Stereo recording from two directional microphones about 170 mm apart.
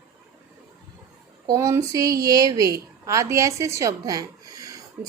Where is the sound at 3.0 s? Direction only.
15° right (ahead or behind).